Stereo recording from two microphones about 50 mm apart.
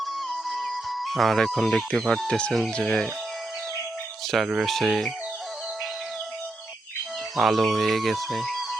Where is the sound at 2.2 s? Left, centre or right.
Centre.